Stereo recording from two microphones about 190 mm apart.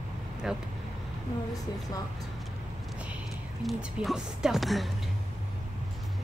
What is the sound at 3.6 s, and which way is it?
Speech, centre (ahead or behind).